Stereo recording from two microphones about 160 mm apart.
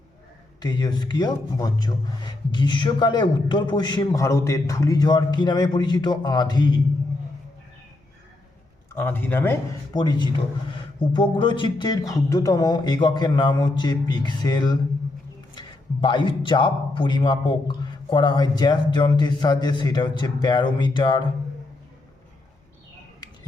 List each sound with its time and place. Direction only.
0.6 s a man's voice: 25° left (ahead or behind)
9.0 s speech: 15° left (ahead or behind)
9.9 s a man's voice: 25° left (ahead or behind)